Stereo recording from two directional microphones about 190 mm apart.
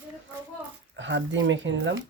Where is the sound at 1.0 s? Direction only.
75° right (ahead or behind).